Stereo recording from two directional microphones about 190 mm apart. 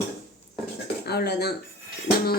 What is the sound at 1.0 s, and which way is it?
Speech, 60° left (ahead or behind).